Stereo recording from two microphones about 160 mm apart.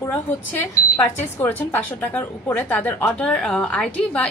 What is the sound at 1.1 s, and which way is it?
A woman's voice, 15° left (ahead or behind).